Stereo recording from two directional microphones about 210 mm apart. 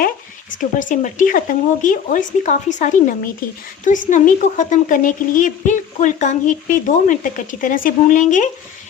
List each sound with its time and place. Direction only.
0.8 s a woman's voice: 40° left (ahead or behind)